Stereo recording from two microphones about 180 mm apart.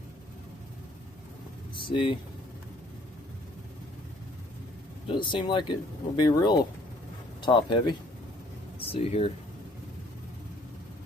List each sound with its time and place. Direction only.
1.7 s vehicle: 30° left (ahead or behind)
5.0 s speech: 25° left (ahead or behind)